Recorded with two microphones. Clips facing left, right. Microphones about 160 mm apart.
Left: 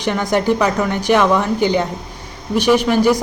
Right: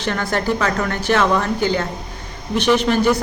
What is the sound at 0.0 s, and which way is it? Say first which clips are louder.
A woman's voice: left 4 dB; 15° left (ahead or behind).